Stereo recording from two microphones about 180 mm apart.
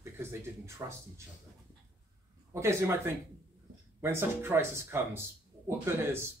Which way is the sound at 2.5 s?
15° right (ahead or behind).